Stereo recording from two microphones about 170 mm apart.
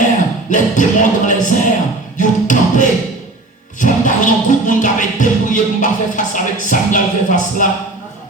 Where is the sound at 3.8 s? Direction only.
50° left (ahead or behind).